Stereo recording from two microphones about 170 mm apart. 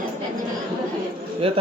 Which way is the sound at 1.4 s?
35° right (ahead or behind).